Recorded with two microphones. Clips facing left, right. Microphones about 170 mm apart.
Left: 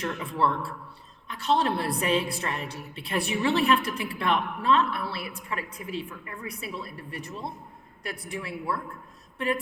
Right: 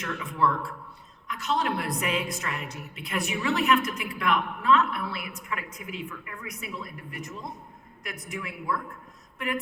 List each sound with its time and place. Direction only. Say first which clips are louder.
0.0 s a woman's voice: even; 30° left (ahead or behind)